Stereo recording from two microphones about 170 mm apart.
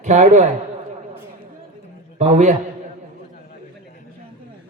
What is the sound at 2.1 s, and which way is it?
Speech, 40° right (ahead or behind).